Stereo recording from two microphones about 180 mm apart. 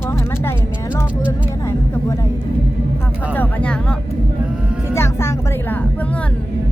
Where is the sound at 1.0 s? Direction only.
15° left (ahead or behind).